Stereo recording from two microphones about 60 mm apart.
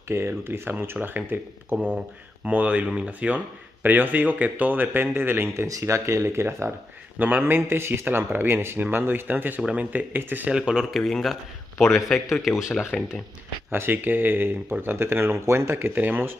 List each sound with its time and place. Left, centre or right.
0.3 s speech: right
5.7 s speech: right
7.2 s speech: right
9.6 s speech: centre
10.1 s speech: right
10.5 s speech: centre
11.0 s a man's voice: centre
13.7 s speech: right
15.9 s speech: right